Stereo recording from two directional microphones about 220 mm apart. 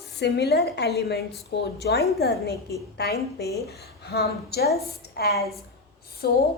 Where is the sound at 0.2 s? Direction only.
50° left (ahead or behind).